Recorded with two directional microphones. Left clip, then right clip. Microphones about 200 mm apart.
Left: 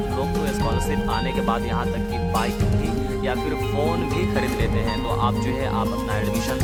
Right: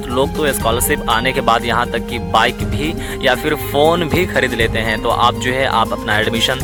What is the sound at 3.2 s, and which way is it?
Speech, 40° right (ahead or behind).